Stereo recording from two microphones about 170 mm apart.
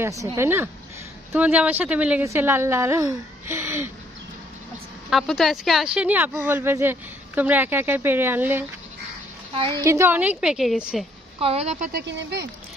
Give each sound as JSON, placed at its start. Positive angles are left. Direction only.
{"t": 0.0, "sound": "speech", "side_deg": -20}
{"t": 5.1, "sound": "speech", "side_deg": 0}
{"t": 9.8, "sound": "a woman's voice", "side_deg": -15}
{"t": 11.3, "sound": "a woman's voice", "side_deg": -35}
{"t": 11.9, "sound": "speech", "side_deg": -90}